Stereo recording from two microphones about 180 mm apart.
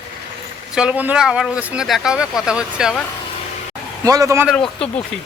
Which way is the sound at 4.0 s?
20° right (ahead or behind).